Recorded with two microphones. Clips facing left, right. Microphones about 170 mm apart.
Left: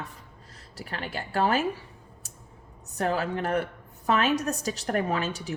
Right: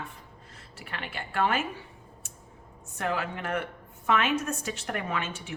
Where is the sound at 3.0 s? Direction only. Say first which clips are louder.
Left 4 dB; 35° left (ahead or behind).